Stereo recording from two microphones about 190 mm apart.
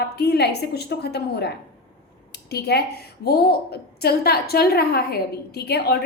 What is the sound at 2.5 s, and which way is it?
A woman's voice, 60° left (ahead or behind).